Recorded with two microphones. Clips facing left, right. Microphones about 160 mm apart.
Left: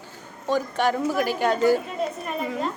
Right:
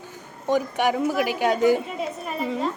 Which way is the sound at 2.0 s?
Centre (ahead or behind).